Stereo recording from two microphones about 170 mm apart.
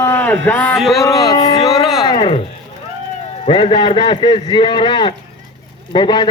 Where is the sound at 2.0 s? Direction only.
30° left (ahead or behind).